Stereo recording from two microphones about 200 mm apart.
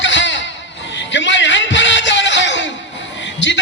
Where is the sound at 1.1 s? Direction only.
65° left (ahead or behind).